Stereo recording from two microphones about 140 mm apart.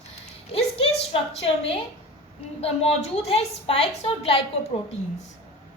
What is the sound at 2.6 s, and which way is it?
A woman's voice, 45° left (ahead or behind).